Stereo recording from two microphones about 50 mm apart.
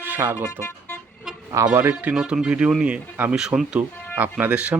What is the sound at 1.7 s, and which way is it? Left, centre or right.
Speech, right.